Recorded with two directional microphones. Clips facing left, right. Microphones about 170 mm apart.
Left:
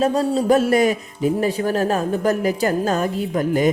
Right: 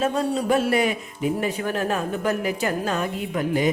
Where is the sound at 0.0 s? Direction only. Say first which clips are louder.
Left 4 dB; 35° left (ahead or behind).